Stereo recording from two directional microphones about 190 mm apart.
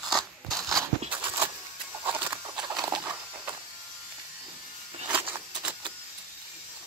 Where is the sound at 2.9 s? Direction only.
10° right (ahead or behind).